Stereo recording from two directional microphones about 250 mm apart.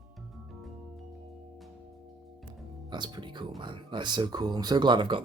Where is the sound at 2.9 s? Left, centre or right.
Centre.